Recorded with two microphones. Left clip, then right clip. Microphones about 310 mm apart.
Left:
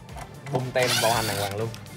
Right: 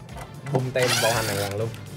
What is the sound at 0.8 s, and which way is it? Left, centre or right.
Speech, centre.